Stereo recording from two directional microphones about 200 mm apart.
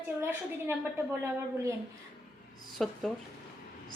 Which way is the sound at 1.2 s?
15° right (ahead or behind).